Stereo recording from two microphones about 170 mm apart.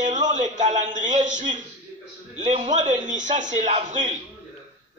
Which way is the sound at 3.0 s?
45° right (ahead or behind).